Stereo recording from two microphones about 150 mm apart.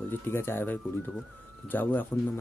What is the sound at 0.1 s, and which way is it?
Speech, 15° left (ahead or behind).